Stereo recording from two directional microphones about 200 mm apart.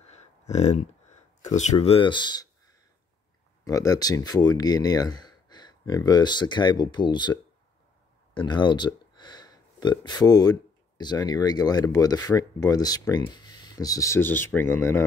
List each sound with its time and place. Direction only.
0.1 s a sound: 35° left (ahead or behind)
1.4 s speech: 35° left (ahead or behind)
3.6 s speech: 15° left (ahead or behind)
8.4 s speech: 25° left (ahead or behind)